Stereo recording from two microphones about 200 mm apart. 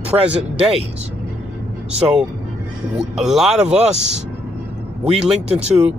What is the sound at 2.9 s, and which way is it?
Speech, centre (ahead or behind).